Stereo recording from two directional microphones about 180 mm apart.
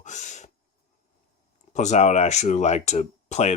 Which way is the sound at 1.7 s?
40° left (ahead or behind).